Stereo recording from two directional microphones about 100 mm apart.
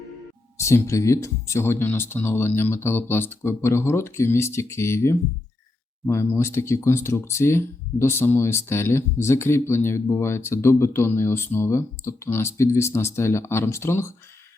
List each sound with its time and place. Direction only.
0.5 s speech: 30° left (ahead or behind)